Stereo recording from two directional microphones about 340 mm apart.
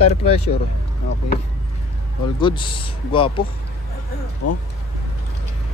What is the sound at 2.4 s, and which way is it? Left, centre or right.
Speech, centre.